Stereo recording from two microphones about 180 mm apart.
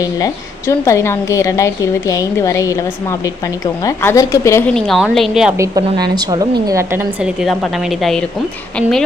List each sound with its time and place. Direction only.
0.7 s a woman's voice: 15° left (ahead or behind)
4.7 s a woman's voice: 5° left (ahead or behind)
5.5 s a woman's voice: 20° right (ahead or behind); by 8.2 s centre (ahead or behind)